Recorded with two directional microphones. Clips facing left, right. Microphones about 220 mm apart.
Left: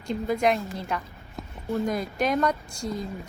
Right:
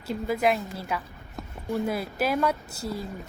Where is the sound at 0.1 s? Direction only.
5° right (ahead or behind).